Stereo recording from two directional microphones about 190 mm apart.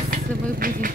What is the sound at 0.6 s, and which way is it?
Speech, 50° right (ahead or behind).